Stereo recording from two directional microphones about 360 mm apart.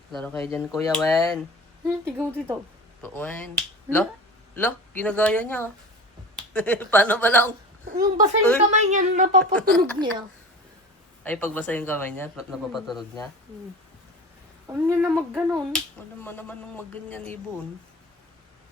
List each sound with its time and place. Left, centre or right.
0.1 s speech: centre
1.8 s speech: centre
3.0 s speech: centre
7.9 s a woman's voice: right
9.4 s speech: centre
11.2 s speech: centre
14.7 s speech: centre